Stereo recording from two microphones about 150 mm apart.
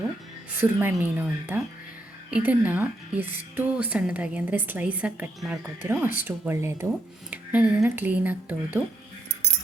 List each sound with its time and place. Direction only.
0.6 s a woman's voice: 15° right (ahead or behind)